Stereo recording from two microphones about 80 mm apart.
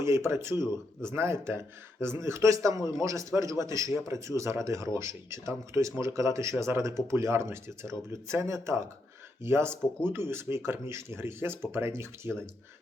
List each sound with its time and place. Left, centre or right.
0.0 s speech: right